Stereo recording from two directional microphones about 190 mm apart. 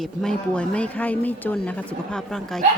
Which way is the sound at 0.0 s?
5° left (ahead or behind).